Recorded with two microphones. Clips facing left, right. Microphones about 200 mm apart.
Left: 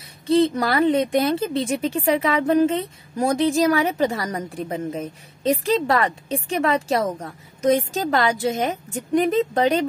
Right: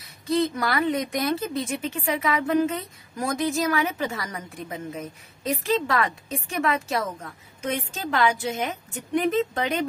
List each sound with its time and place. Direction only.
0.3 s a woman's voice: 30° left (ahead or behind)